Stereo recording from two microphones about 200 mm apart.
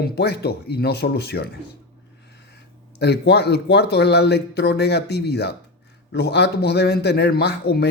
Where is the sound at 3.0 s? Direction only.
55° left (ahead or behind).